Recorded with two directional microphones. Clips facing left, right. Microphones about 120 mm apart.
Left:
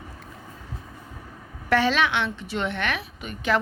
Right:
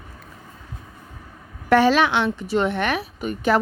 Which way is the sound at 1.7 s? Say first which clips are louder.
Right 5 dB; 40° right (ahead or behind).